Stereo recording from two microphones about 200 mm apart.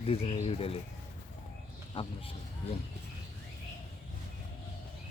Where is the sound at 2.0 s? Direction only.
25° left (ahead or behind).